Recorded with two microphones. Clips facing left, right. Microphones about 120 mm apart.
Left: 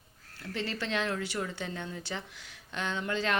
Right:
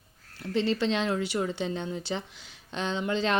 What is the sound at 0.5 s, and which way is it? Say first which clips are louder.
Speech: right 7 dB; 25° right (ahead or behind).